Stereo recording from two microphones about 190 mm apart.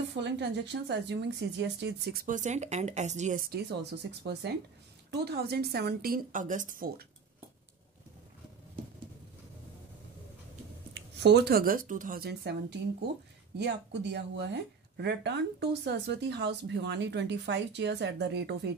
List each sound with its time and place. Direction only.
0.1 s speech: 65° right (ahead or behind)
2.2 s speech: 40° right (ahead or behind)
11.0 s speech: 60° right (ahead or behind)